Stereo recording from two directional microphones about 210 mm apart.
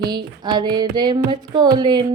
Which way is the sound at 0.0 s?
20° right (ahead or behind).